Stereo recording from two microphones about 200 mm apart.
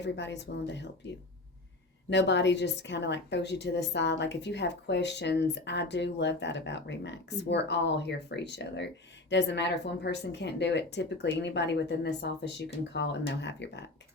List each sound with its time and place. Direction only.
0.0 s a woman's voice: 60° left (ahead or behind)
2.0 s a woman's voice: 60° left (ahead or behind)